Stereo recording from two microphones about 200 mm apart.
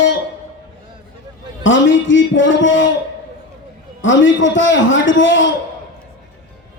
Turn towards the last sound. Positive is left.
turn(degrees=70)  # may be behind; listen again after turning